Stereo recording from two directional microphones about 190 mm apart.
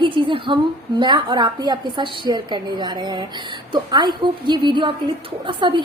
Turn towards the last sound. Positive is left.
turn(degrees=-25)  # may be behind; listen again after turning